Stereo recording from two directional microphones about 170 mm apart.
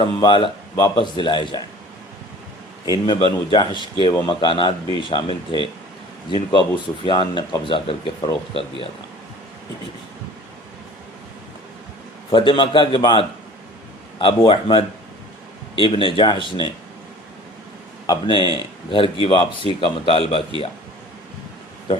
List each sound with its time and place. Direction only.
0.0 s a man's voice: 30° left (ahead or behind)
2.8 s a man's voice: 25° left (ahead or behind)
12.3 s a man's voice: 30° left (ahead or behind)
18.0 s speech: 25° left (ahead or behind)